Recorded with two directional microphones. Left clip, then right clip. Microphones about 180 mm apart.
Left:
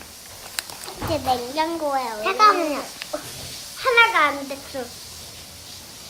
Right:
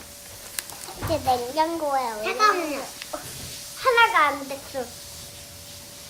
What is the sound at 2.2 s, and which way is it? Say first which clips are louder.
Speech: left 6 dB; 10° left (ahead or behind).